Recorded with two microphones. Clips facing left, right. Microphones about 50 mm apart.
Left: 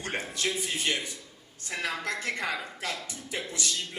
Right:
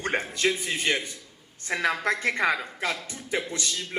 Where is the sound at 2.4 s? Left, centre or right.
Right.